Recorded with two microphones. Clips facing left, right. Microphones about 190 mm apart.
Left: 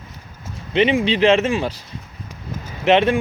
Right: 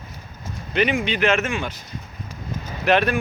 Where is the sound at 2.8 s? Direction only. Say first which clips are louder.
Left 4 dB; 25° left (ahead or behind).